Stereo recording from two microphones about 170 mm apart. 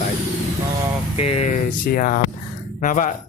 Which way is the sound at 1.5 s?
55° left (ahead or behind).